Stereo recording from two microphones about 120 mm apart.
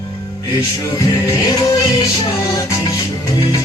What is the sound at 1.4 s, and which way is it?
Music, 35° left (ahead or behind).